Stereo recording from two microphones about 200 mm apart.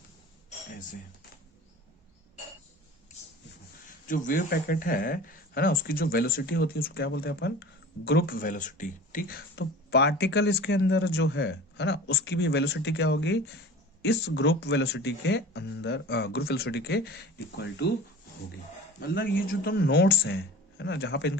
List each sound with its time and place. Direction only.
4.0 s speech: 40° left (ahead or behind); by 17.8 s 55° left (ahead or behind)
18.9 s speech: 50° left (ahead or behind)